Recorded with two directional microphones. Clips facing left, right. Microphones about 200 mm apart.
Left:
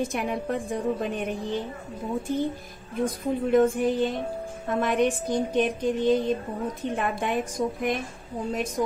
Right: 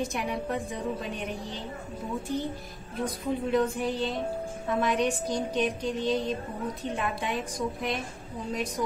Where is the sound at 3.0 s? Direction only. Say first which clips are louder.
Left 3 dB; 50° left (ahead or behind).